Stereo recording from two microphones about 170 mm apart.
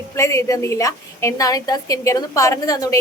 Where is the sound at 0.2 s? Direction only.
20° left (ahead or behind).